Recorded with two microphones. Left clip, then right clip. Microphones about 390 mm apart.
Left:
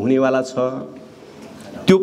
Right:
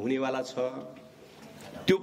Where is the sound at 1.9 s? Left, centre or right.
Left.